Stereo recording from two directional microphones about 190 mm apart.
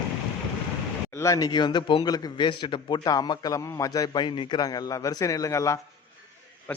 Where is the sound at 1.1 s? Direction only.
15° left (ahead or behind).